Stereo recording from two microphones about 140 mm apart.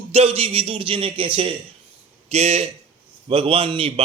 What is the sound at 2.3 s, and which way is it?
Speech, 50° right (ahead or behind).